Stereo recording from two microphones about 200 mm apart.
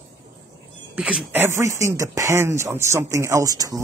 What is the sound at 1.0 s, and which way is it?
Speech, 5° right (ahead or behind).